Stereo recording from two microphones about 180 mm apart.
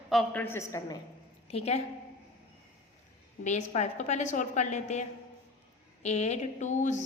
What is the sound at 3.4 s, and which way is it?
A woman's voice, 40° left (ahead or behind).